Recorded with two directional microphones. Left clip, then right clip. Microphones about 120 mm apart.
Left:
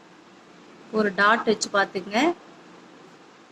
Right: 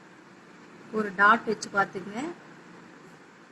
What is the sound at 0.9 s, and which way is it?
A woman's voice, 45° left (ahead or behind).